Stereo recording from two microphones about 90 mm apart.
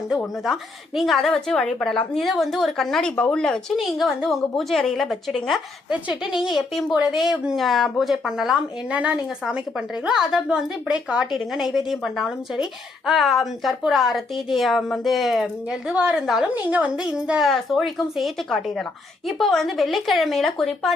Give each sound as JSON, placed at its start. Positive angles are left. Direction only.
{"t": 0.4, "sound": "a woman's voice", "side_deg": 0}
{"t": 5.9, "sound": "a woman's voice", "side_deg": -10}
{"t": 15.9, "sound": "speech", "side_deg": -10}
{"t": 16.6, "sound": "a woman's voice", "side_deg": -15}